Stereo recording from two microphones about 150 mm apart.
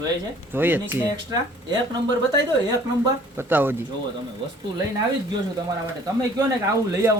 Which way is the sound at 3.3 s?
15° right (ahead or behind).